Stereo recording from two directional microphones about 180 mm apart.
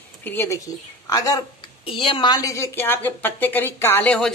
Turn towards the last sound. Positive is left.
turn(degrees=5)  # may be behind; listen again after turning